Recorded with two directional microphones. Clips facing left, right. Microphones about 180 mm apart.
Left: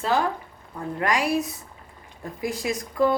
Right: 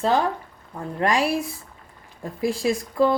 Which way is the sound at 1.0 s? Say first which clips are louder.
Right 2 dB; 30° right (ahead or behind).